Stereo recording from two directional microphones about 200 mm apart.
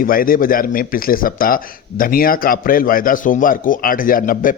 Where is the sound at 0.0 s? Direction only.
45° left (ahead or behind).